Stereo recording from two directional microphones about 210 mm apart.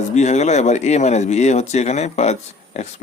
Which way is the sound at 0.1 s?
35° left (ahead or behind).